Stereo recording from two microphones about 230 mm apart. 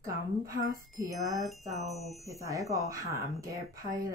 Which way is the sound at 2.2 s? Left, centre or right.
Centre.